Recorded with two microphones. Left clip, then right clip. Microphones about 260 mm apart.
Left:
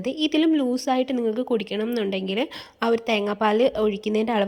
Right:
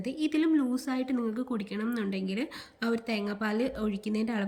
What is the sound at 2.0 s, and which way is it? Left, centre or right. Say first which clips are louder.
Speech: left 9 dB; left.